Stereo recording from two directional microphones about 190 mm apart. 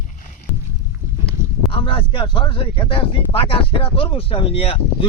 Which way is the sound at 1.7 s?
30° left (ahead or behind).